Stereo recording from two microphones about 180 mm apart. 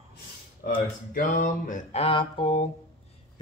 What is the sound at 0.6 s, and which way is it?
Speech, 50° left (ahead or behind).